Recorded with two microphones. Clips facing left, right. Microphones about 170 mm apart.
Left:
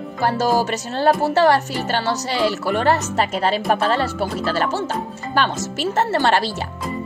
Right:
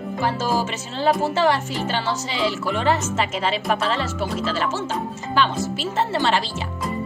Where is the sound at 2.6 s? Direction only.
40° left (ahead or behind).